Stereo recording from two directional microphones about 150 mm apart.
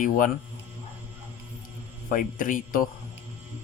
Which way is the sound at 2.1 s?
60° left (ahead or behind).